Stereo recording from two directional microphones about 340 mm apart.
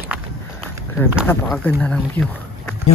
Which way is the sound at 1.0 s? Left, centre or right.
Centre.